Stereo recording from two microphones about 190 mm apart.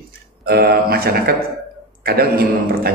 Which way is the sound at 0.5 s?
55° right (ahead or behind).